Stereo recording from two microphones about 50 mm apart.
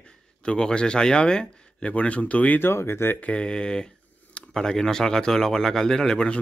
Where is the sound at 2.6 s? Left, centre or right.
Left.